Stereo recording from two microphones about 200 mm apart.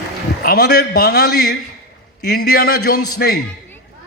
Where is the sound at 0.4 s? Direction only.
50° left (ahead or behind).